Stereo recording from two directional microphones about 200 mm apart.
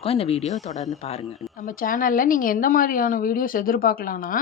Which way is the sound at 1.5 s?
45° left (ahead or behind).